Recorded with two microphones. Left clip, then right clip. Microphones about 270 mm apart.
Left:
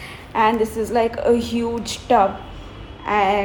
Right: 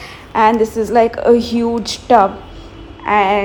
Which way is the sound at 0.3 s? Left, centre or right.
Right.